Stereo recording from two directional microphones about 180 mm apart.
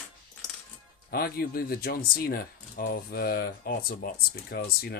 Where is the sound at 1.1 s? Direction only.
55° left (ahead or behind).